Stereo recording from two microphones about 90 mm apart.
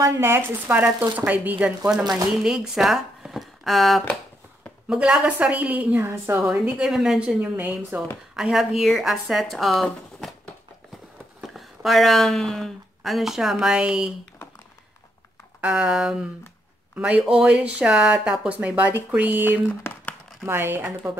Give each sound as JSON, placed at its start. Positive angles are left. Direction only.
{"t": 0.0, "sound": "speech", "side_deg": -30}
{"t": 2.4, "sound": "speech", "side_deg": -5}
{"t": 4.8, "sound": "a woman's voice", "side_deg": -10}
{"t": 6.3, "sound": "a woman's voice", "side_deg": -10}
{"t": 8.4, "sound": "a woman's voice", "side_deg": -5}
{"t": 11.4, "sound": "speech", "side_deg": 0}
{"t": 15.6, "sound": "a woman's voice", "side_deg": -5}
{"t": 19.9, "sound": "crumpling", "side_deg": 30}
{"t": 20.4, "sound": "speech", "side_deg": -25}